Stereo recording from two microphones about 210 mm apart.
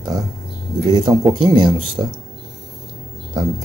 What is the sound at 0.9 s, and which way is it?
Speech, 20° right (ahead or behind).